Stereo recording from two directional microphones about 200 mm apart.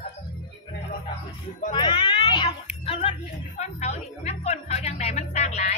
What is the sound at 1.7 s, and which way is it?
Children playing, 25° left (ahead or behind).